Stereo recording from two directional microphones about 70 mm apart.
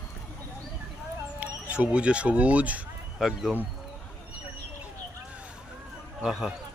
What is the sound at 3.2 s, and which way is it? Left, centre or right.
Speech, centre.